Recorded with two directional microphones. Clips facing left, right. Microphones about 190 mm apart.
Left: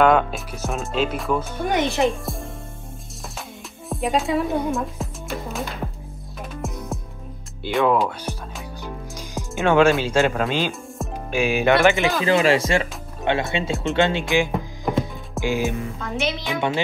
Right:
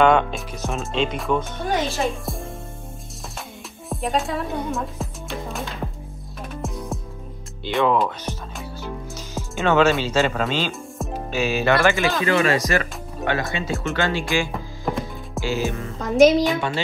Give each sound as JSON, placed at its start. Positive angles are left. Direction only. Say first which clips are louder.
{"t": 0.0, "sound": "speech", "louder": "even", "side_deg": 5}
{"t": 1.6, "sound": "speech", "louder": "left 3 dB", "side_deg": 15}
{"t": 3.9, "sound": "speech", "louder": "left 3 dB", "side_deg": 0}
{"t": 6.5, "sound": "music", "louder": "right 1 dB", "side_deg": 0}
{"t": 7.6, "sound": "speech", "louder": "left 1 dB", "side_deg": 5}
{"t": 8.8, "sound": "music", "louder": "right 1 dB", "side_deg": 15}
{"t": 10.0, "sound": "speech", "louder": "left 1 dB", "side_deg": 10}
{"t": 16.0, "sound": "music", "louder": "right 16 dB", "side_deg": -40}
{"t": 16.5, "sound": "speech", "louder": "left 2 dB", "side_deg": 20}